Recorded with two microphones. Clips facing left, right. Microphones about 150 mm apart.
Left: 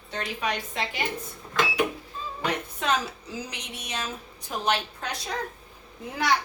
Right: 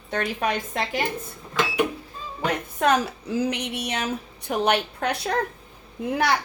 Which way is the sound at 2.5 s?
55° right (ahead or behind).